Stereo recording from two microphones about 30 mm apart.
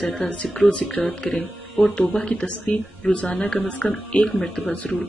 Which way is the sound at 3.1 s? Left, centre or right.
Left.